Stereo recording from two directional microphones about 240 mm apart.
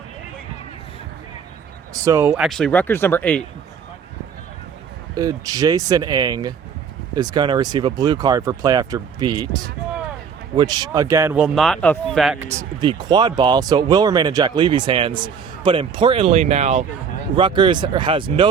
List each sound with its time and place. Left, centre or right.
1.9 s speech: centre
5.1 s speech: centre
12.8 s speech: centre